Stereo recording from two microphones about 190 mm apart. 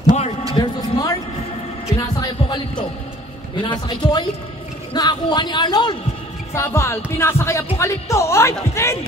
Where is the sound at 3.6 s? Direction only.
25° left (ahead or behind).